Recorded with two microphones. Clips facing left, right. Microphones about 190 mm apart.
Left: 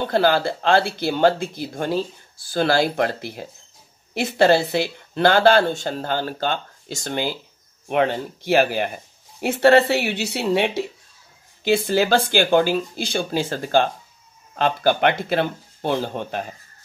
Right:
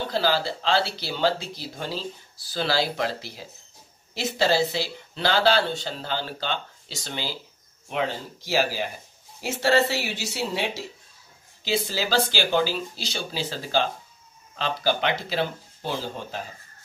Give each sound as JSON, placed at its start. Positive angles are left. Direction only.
{"t": 0.1, "sound": "speech", "side_deg": 55}